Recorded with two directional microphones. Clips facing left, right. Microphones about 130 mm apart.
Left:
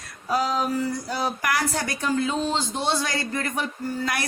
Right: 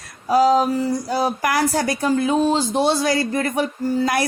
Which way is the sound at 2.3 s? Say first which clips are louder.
Right 8 dB; 55° right (ahead or behind).